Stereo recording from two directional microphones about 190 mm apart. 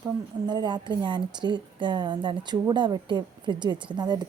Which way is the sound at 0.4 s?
25° right (ahead or behind).